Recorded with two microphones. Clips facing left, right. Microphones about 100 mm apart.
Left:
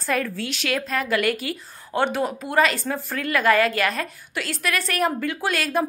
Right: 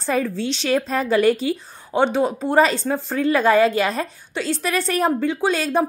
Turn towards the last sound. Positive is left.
turn(degrees=-25)  # may be behind; listen again after turning